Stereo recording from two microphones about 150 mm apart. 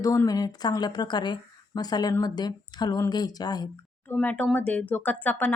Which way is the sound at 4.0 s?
10° left (ahead or behind).